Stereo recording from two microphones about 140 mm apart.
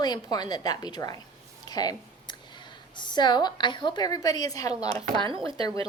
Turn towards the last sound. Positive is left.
turn(degrees=-40)  # may be behind; listen again after turning